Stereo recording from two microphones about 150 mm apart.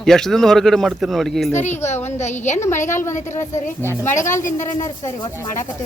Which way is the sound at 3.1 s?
55° left (ahead or behind).